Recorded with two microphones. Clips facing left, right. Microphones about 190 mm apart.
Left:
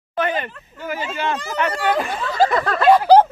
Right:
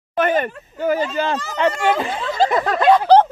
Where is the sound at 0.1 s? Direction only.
50° right (ahead or behind).